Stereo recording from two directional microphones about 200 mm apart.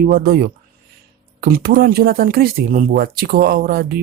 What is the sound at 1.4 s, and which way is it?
Speech, 50° right (ahead or behind).